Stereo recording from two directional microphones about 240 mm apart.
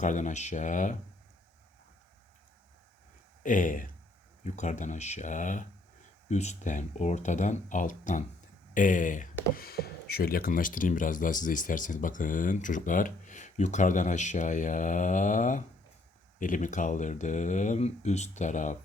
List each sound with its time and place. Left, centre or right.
0.0 s speech: left
3.4 s speech: left